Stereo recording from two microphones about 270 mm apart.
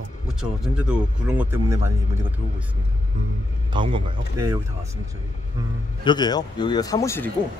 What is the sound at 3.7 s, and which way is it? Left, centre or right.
Speech, centre.